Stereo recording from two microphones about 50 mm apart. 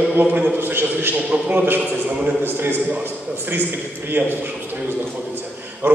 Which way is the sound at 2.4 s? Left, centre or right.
Right.